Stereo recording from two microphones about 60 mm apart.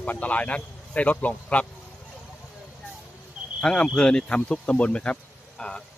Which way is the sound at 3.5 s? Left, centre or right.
Centre.